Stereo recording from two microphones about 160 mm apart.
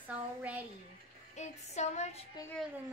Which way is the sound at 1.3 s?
45° left (ahead or behind).